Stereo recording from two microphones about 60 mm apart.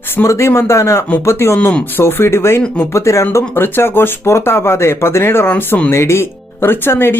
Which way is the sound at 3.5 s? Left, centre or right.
Left.